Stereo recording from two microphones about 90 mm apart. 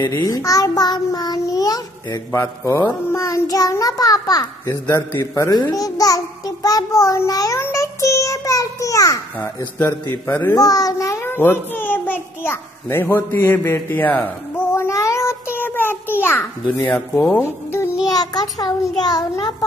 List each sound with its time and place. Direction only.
0.2 s child singing: 40° left (ahead or behind)
2.3 s child singing: 30° left (ahead or behind)
4.6 s a child's voice: 30° left (ahead or behind)
7.6 s child singing: 35° left (ahead or behind)
9.8 s a man's voice: 25° left (ahead or behind)
10.5 s a child's voice: 40° left (ahead or behind); by 14.2 s 20° left (ahead or behind)
14.7 s child singing: 30° left (ahead or behind)
16.8 s a man's voice: 20° left (ahead or behind)
17.4 s music: 25° left (ahead or behind)
18.1 s a child's voice: 50° left (ahead or behind)